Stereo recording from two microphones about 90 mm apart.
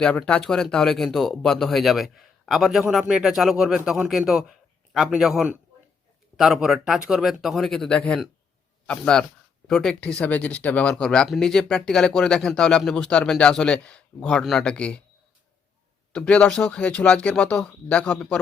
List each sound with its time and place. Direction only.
0.0 s speech: 10° left (ahead or behind); by 4.3 s 10° right (ahead or behind)
4.3 s a sound: 5° right (ahead or behind)
6.3 s speech: 5° right (ahead or behind)
16.1 s speech: 10° left (ahead or behind)